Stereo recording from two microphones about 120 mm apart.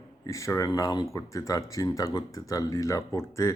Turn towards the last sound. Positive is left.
turn(degrees=25)  # may be behind; listen again after turning